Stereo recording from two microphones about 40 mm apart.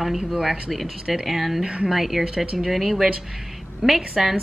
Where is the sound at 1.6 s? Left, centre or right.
Right.